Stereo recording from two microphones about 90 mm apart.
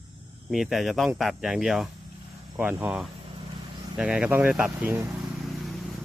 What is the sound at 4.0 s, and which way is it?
Speech, 10° right (ahead or behind).